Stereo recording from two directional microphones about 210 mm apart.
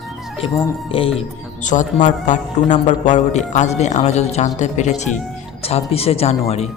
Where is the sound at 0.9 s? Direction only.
25° left (ahead or behind).